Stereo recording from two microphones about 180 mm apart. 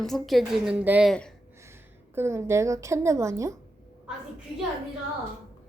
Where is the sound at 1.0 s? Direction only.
5° left (ahead or behind).